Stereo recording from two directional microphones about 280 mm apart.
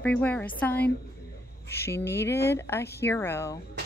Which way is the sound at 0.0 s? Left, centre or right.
Centre.